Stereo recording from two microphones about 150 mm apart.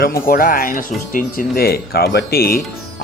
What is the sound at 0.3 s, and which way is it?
Speech, 75° left (ahead or behind).